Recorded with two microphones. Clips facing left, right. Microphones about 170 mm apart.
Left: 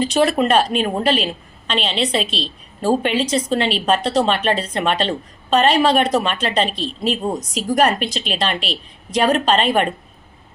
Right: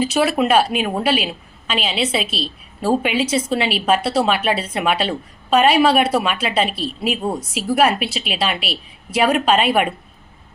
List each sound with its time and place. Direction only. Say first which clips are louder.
0.0 s a woman's voice: left 1 dB; 10° right (ahead or behind)